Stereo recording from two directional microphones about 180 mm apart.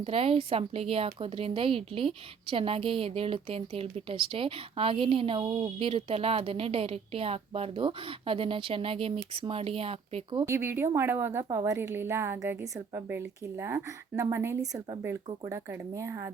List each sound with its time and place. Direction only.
0.0 s speech: 30° right (ahead or behind)
10.4 s speech: 15° right (ahead or behind)